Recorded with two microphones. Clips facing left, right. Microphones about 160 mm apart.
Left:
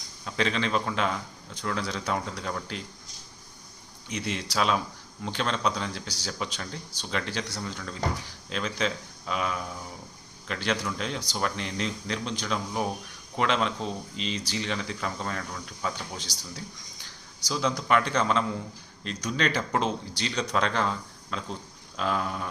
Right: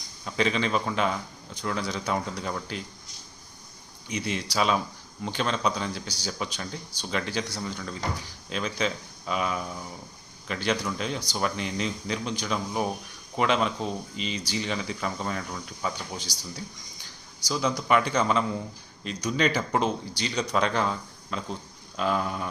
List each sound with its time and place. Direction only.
0.3 s speech: 5° right (ahead or behind)
4.1 s speech: centre (ahead or behind)